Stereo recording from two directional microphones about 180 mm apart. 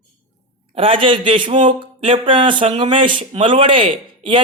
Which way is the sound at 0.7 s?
30° right (ahead or behind).